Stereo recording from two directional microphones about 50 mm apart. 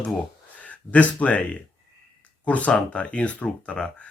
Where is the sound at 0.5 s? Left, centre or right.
Left.